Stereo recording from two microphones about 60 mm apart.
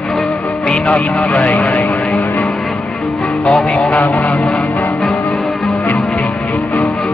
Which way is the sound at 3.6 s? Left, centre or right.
Centre.